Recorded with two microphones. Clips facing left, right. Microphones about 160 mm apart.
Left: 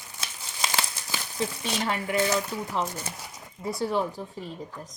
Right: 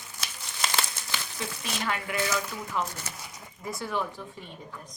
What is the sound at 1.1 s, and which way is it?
Speech, 30° left (ahead or behind).